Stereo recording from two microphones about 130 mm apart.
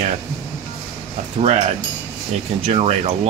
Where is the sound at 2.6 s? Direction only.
55° right (ahead or behind).